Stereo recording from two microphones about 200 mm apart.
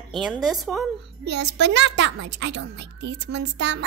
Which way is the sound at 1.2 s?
60° right (ahead or behind).